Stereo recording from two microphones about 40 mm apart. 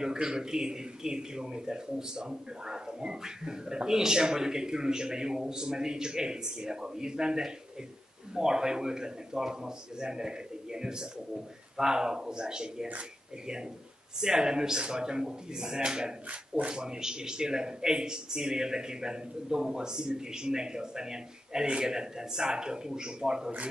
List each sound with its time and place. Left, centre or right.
0.0 s a man's voice: centre
14.2 s a man's voice: centre